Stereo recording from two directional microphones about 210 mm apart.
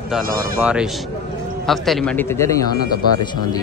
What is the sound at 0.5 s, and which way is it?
A man's voice, 5° right (ahead or behind).